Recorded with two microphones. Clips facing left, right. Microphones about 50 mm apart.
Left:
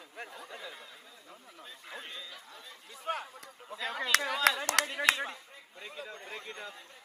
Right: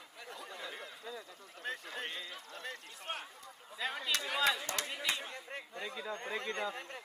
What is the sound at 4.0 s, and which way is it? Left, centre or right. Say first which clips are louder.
Clapping: left 6 dB; left.